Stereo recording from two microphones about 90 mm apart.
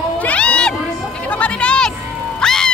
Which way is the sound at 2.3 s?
5° left (ahead or behind).